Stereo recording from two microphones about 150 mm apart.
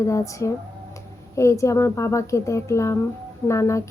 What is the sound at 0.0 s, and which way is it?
A woman's voice, 20° left (ahead or behind).